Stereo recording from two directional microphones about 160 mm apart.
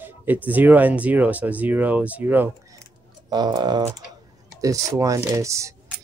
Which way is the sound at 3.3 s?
25° right (ahead or behind).